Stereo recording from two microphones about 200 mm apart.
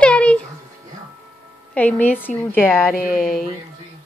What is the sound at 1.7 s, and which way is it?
A woman's voice, 5° left (ahead or behind).